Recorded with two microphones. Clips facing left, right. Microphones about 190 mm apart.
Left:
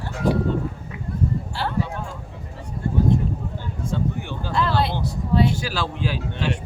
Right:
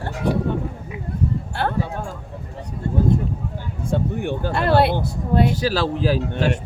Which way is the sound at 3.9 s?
55° right (ahead or behind).